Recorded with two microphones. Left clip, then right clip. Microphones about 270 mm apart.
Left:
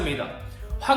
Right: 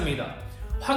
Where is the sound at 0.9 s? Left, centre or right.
Centre.